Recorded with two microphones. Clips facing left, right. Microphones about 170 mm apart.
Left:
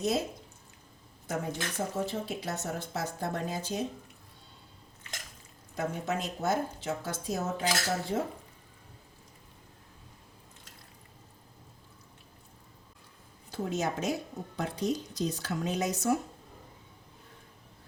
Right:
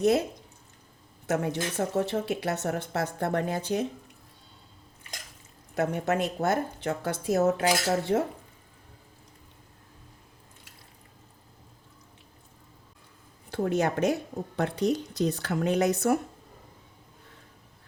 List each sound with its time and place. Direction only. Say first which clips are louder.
0.0 s a woman's voice: right 7 dB; 60° right (ahead or behind)
1.3 s a woman's voice: right 6 dB; 70° right (ahead or behind)
5.7 s a woman's voice: right 6 dB; 70° right (ahead or behind)
13.5 s a woman's voice: right 6 dB; 60° right (ahead or behind)